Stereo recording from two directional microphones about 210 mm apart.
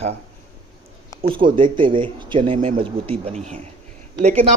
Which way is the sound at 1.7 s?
25° right (ahead or behind).